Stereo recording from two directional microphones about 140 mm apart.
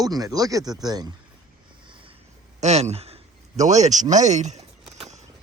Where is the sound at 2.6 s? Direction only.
50° right (ahead or behind).